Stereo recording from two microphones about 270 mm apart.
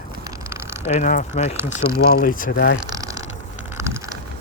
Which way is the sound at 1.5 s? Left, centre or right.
Centre.